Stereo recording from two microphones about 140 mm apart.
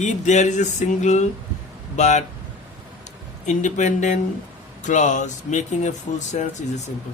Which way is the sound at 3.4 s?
60° left (ahead or behind).